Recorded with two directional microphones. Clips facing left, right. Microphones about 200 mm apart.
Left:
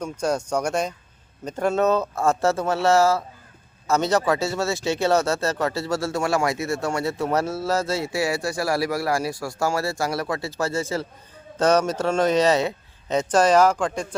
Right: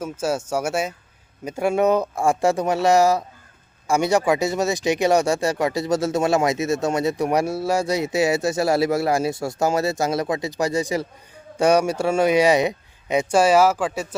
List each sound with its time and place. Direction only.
0.0 s speech: 5° right (ahead or behind)